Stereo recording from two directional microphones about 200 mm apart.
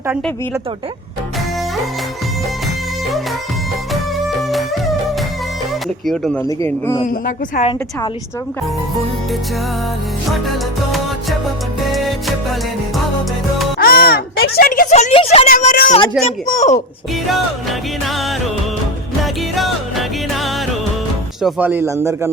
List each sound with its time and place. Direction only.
4.4 s music: centre (ahead or behind)
6.1 s music: centre (ahead or behind)
6.6 s speech: 15° left (ahead or behind)
7.0 s speech: 40° left (ahead or behind)
11.9 s music: centre (ahead or behind)
13.7 s music: 50° left (ahead or behind)
14.4 s speech: 50° left (ahead or behind); by 15.4 s 30° left (ahead or behind)
15.4 s speech: 45° left (ahead or behind)
17.3 s music: centre (ahead or behind)
21.4 s a man's voice: 10° right (ahead or behind)